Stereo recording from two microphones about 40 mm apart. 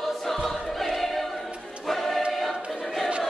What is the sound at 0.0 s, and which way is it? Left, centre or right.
Choir, centre.